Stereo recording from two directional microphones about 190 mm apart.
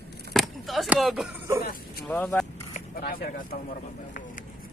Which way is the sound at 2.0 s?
5° left (ahead or behind).